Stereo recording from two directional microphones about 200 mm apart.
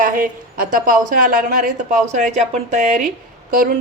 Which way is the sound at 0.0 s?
45° right (ahead or behind).